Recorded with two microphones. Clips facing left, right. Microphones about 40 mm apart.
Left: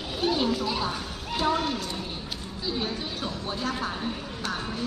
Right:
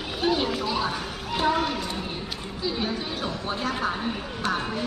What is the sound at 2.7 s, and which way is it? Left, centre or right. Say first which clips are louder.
A woman's voice: right 2 dB; centre.